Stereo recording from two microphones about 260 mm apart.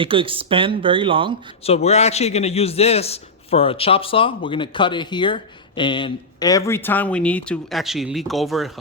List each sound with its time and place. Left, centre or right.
0.0 s speech: centre
1.6 s a man's voice: left; by 8.7 s centre